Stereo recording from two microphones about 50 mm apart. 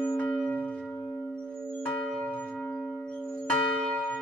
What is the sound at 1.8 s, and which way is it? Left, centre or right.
Church bell, left.